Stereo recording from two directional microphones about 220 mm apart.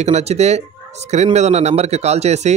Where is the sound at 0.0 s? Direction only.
30° right (ahead or behind).